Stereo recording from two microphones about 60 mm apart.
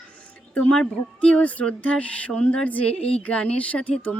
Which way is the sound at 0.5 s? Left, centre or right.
Left.